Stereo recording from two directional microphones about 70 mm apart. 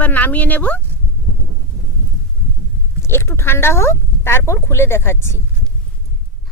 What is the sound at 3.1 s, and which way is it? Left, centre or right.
Speech, left.